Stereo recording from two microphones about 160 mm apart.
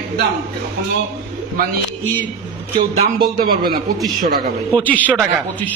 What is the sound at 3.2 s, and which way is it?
A man's voice, 70° right (ahead or behind).